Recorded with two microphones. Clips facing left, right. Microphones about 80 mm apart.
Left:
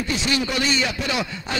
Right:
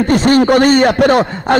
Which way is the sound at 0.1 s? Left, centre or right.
Right.